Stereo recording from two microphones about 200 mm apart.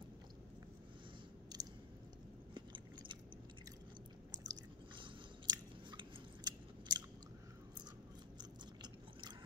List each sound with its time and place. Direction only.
1.5 s chewing: 20° right (ahead or behind)
2.5 s biting: 25° right (ahead or behind)
4.5 s chewing: 20° right (ahead or behind)
8.4 s biting: 20° right (ahead or behind)